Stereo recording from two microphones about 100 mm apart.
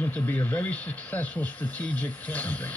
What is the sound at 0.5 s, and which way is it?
Speech, 15° left (ahead or behind).